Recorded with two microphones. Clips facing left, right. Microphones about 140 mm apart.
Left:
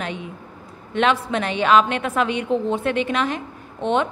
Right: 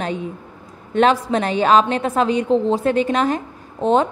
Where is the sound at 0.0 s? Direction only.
40° right (ahead or behind).